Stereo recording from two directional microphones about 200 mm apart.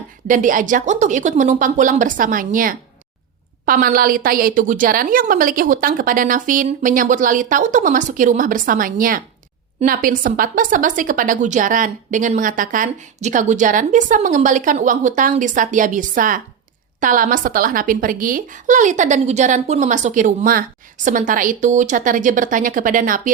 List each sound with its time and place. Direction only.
0.3 s a woman's voice: 40° right (ahead or behind)